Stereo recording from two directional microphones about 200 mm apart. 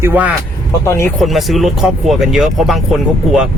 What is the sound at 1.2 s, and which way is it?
Speech, centre (ahead or behind).